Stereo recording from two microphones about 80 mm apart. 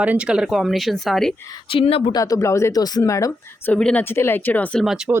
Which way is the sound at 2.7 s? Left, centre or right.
Left.